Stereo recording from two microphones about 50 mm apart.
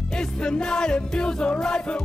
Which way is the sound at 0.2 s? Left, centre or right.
Centre.